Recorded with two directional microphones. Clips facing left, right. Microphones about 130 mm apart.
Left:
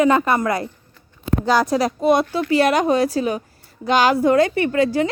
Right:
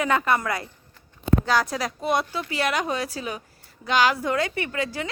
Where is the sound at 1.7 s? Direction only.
40° left (ahead or behind).